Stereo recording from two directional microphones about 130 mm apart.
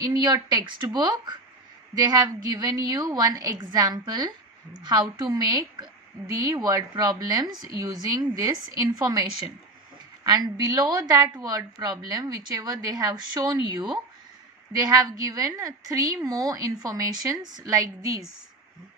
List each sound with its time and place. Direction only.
0.0 s a woman's voice: 35° right (ahead or behind)
10.2 s a woman's voice: 30° right (ahead or behind)
15.2 s speech: 30° right (ahead or behind)